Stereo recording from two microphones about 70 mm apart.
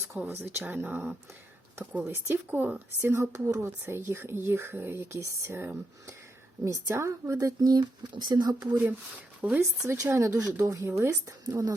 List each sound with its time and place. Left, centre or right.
0.3 s speech: right
1.8 s speech: right
2.1 s speech: right
2.5 s speech: right
2.7 s speech: right
3.6 s speech: right
7.3 s speech: right
8.7 s speech: right
9.6 s speech: right